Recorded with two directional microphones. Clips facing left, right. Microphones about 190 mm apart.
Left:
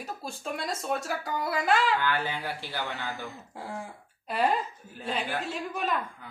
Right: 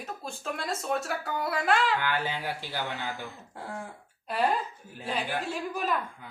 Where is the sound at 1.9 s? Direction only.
15° right (ahead or behind).